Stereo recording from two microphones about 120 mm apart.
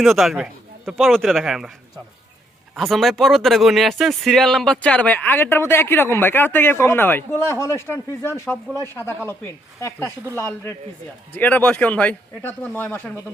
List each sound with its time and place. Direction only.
0.0 s speech: centre (ahead or behind)
2.7 s speech: centre (ahead or behind); by 9.3 s 20° left (ahead or behind)
10.3 s speech: 15° left (ahead or behind)